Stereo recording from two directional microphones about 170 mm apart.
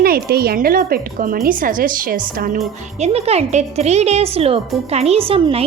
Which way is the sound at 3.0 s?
40° right (ahead or behind).